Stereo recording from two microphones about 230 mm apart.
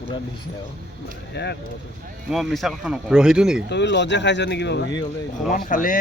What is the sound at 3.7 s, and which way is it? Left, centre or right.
Speech, left.